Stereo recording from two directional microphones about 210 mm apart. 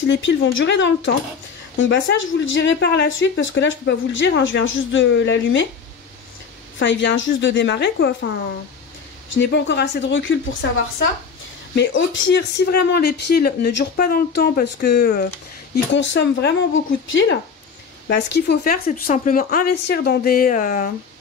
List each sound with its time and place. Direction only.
0.1 s speech: 60° left (ahead or behind)
6.8 s speech: 55° left (ahead or behind)
9.3 s speech: 55° left (ahead or behind)
15.7 s speech: 60° left (ahead or behind); by 20.9 s 40° left (ahead or behind)